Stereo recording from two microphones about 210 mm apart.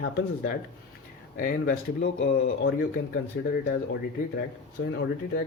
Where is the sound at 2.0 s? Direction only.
70° left (ahead or behind).